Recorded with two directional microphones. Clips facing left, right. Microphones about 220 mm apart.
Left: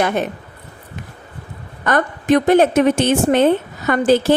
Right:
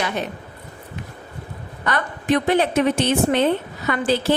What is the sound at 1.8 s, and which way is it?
Speech, 45° left (ahead or behind).